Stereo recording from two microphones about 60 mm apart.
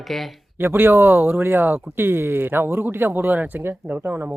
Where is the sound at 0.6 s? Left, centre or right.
Right.